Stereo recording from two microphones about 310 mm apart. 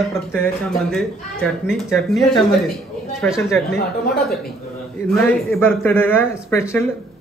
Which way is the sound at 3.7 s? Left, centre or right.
Left.